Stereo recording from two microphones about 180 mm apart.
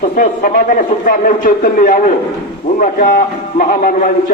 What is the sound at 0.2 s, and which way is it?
A man's voice, 50° left (ahead or behind).